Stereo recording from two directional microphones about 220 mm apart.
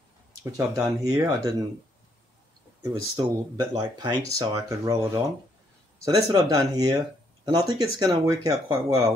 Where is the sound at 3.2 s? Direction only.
15° right (ahead or behind).